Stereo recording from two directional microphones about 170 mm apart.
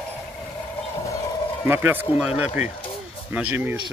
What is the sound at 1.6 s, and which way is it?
Speech, 10° right (ahead or behind).